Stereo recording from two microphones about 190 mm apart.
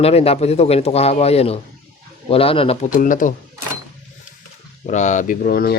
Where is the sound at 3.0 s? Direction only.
45° left (ahead or behind).